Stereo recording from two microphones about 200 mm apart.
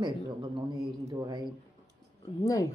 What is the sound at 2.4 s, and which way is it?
Speech, 15° left (ahead or behind).